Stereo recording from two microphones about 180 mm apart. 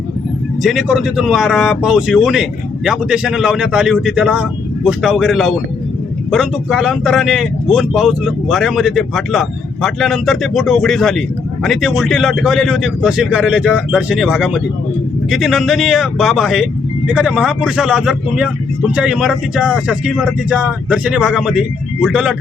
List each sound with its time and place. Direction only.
0.6 s speech: centre (ahead or behind)